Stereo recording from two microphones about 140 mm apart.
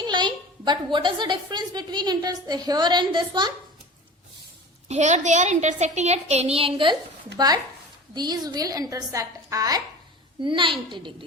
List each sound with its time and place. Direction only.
0.0 s a woman's voice: 30° right (ahead or behind)
4.9 s a woman's voice: 60° right (ahead or behind); by 6.9 s 40° right (ahead or behind)
7.3 s a woman's voice: 25° right (ahead or behind)
10.4 s a woman's voice: 35° right (ahead or behind)